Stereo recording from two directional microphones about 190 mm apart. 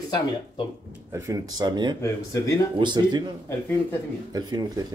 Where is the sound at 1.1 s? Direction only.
20° right (ahead or behind).